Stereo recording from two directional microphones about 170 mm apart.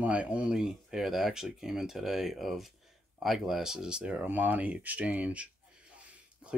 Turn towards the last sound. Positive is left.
turn(degrees=-10)  # may be behind; listen again after turning